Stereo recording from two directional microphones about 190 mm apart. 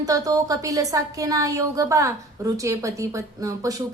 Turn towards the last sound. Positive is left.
turn(degrees=-15)  # may be behind; listen again after turning